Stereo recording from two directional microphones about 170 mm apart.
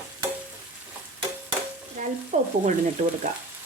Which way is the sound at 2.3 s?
45° right (ahead or behind).